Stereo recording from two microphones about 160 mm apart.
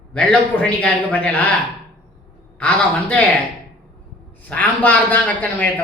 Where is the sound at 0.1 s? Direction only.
10° left (ahead or behind).